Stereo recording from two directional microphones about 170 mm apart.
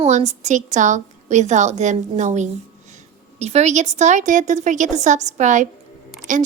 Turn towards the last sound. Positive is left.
turn(degrees=-45)  # may be behind; listen again after turning